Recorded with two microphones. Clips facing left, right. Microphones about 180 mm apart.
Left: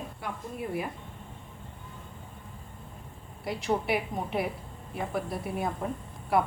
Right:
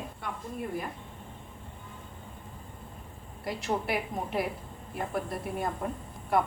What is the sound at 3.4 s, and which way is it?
A woman's voice, centre (ahead or behind).